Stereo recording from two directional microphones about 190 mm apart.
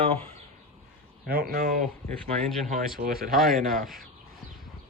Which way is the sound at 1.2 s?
55° right (ahead or behind).